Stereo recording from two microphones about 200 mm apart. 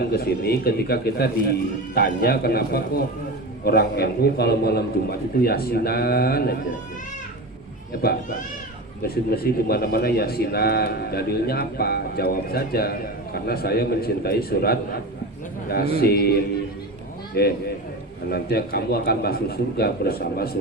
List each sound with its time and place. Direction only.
0.1 s speech: 50° left (ahead or behind)
9.0 s speech: 50° left (ahead or behind)